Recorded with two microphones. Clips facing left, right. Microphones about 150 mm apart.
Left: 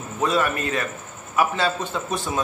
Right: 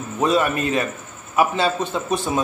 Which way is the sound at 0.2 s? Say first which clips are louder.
Right 3 dB; 20° right (ahead or behind).